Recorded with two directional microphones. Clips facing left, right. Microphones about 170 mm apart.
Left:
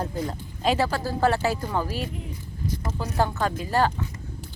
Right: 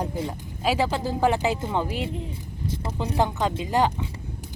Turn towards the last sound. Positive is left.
turn(degrees=-15)  # may be behind; listen again after turning